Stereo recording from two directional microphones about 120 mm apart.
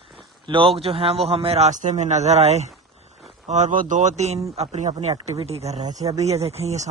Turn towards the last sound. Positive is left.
turn(degrees=-65)  # may be behind; listen again after turning